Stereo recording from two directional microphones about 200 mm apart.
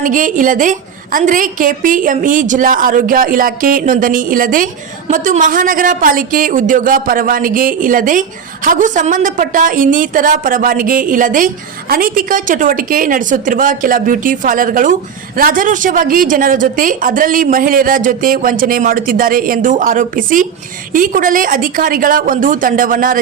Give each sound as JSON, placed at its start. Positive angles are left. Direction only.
{"t": 0.0, "sound": "a woman's voice", "side_deg": -40}